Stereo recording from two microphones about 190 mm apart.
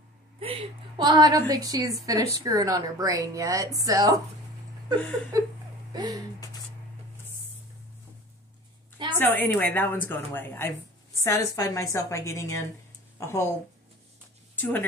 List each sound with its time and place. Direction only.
0.4 s a woman's voice: 25° right (ahead or behind)
5.3 s a woman's voice: 20° right (ahead or behind)
9.2 s a woman's voice: 10° left (ahead or behind)
14.5 s speech: 10° left (ahead or behind)